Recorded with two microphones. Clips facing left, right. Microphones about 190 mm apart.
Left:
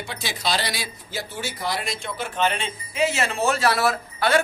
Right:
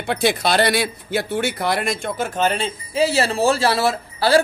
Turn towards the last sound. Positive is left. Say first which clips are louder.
# right 5 dB
turn(degrees=-30)  # may be behind; listen again after turning